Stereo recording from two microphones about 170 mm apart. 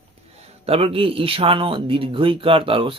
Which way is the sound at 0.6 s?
35° right (ahead or behind).